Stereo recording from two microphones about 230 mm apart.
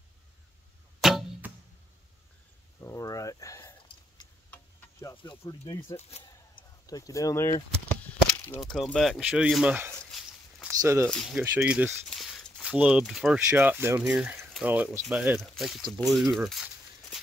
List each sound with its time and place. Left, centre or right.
1.0 s arrow: centre
2.8 s a sound: centre
5.0 s speech: left
8.5 s speech: centre
11.1 s speech: centre
16.4 s a sound: centre